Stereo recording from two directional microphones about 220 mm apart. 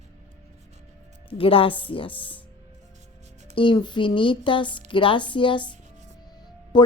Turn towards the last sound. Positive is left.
turn(degrees=20)  # may be behind; listen again after turning